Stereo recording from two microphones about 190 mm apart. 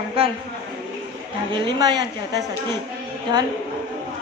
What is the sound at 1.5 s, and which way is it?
Speech, 20° right (ahead or behind).